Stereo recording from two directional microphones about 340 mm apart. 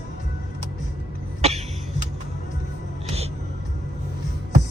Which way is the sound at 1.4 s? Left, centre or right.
Centre.